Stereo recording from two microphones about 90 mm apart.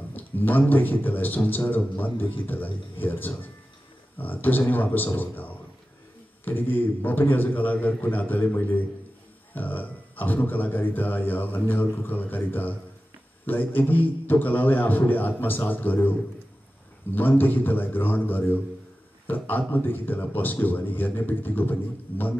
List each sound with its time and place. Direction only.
0.1 s a man's voice: 20° left (ahead or behind)